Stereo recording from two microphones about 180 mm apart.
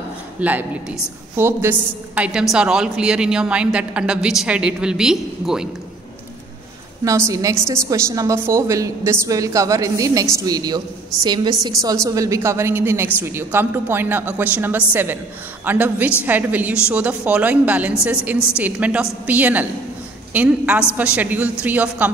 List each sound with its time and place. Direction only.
0.4 s a woman's voice: 10° right (ahead or behind)
7.1 s a woman's voice: 15° right (ahead or behind)